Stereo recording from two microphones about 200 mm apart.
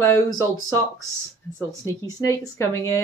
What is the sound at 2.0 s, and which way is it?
Speech, 15° left (ahead or behind).